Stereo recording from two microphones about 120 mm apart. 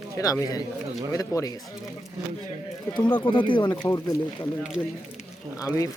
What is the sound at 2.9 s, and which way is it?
Speech, 40° left (ahead or behind).